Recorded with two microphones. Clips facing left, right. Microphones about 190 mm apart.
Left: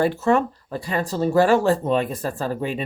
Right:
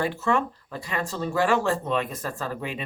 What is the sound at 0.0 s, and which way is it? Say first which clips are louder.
Speech: left 6 dB; 40° left (ahead or behind).